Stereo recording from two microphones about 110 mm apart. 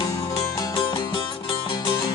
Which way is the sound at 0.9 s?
40° left (ahead or behind).